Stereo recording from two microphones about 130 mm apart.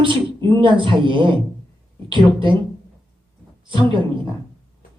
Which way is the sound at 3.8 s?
40° right (ahead or behind).